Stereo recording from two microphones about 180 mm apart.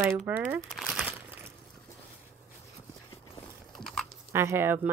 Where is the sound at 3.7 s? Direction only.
Centre (ahead or behind).